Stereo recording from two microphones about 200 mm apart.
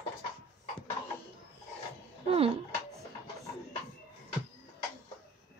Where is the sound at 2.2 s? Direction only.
30° right (ahead or behind).